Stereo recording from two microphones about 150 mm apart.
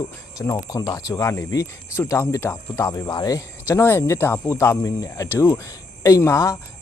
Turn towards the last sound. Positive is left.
turn(degrees=20)  # may be behind; listen again after turning